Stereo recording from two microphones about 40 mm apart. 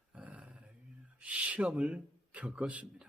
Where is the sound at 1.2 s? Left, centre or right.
Right.